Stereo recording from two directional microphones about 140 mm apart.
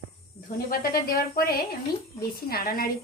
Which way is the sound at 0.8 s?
90° left.